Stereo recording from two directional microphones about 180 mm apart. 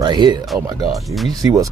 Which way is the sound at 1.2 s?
20° right (ahead or behind).